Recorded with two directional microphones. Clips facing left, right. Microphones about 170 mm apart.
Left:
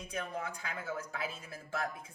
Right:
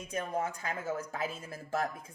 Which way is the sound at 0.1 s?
45° right (ahead or behind).